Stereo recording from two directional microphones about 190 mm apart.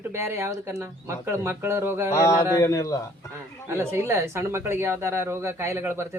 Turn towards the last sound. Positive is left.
turn(degrees=-15)  # may be behind; listen again after turning